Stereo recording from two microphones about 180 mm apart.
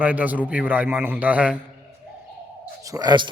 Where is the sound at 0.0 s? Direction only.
10° right (ahead or behind).